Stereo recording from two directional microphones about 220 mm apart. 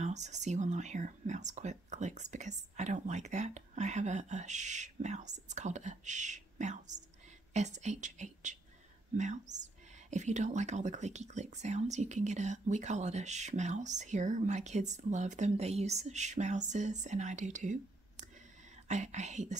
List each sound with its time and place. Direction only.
0.0 s speech: 30° right (ahead or behind)